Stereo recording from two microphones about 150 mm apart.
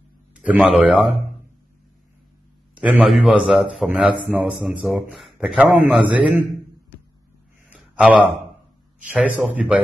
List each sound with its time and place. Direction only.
0.3 s speech: 5° right (ahead or behind)
2.7 s a man's voice: 10° right (ahead or behind)
7.7 s a sound: 5° right (ahead or behind)
9.0 s a man's voice: 5° right (ahead or behind)